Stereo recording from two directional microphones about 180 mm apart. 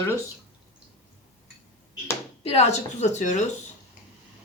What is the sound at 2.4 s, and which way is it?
Speech, 35° left (ahead or behind).